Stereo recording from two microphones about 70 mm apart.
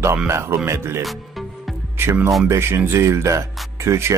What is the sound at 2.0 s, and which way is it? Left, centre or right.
Speech, right.